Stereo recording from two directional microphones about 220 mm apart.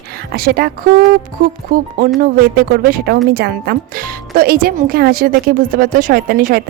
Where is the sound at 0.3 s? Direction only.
45° right (ahead or behind).